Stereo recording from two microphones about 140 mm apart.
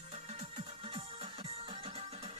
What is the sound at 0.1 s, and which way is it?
Music, 50° right (ahead or behind).